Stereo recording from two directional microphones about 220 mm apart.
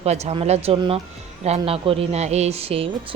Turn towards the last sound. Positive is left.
turn(degrees=-25)  # may be behind; listen again after turning